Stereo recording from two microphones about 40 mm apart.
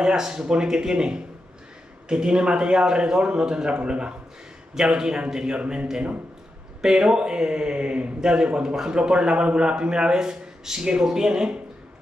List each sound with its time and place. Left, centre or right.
0.0 s a man's voice: centre
5.6 s a man's voice: right
6.8 s a man's voice: centre